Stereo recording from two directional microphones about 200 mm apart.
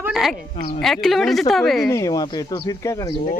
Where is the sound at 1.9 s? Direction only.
15° left (ahead or behind).